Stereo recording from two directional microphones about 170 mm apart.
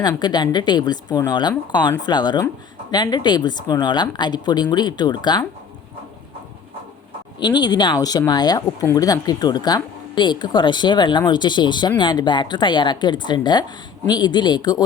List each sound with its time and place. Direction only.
0.0 s speech: 25° left (ahead or behind)
7.3 s speech: 25° left (ahead or behind)